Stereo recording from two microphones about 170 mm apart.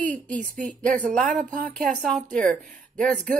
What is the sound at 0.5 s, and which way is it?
A woman's voice, 5° left (ahead or behind).